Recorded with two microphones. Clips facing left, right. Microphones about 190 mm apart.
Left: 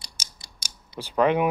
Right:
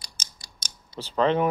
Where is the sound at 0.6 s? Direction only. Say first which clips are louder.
Left 1 dB; 10° left (ahead or behind).